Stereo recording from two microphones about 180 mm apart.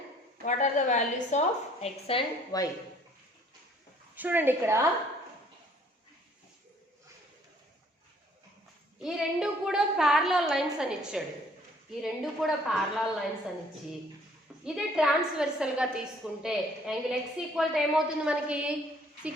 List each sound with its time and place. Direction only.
0.4 s a woman's voice: 45° left (ahead or behind)
2.5 s speech: 20° left (ahead or behind)
4.1 s a woman's voice: 10° right (ahead or behind)
9.0 s a woman's voice: 5° right (ahead or behind)
14.6 s a woman's voice: 5° right (ahead or behind)